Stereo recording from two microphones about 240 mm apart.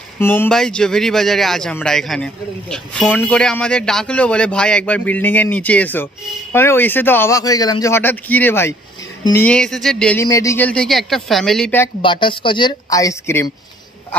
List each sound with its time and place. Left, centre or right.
0.2 s a man's voice: centre
12.0 s speech: centre